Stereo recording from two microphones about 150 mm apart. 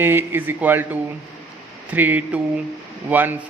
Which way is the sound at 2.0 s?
10° right (ahead or behind).